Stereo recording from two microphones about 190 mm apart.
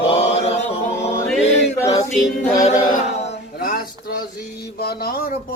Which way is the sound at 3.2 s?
35° left (ahead or behind).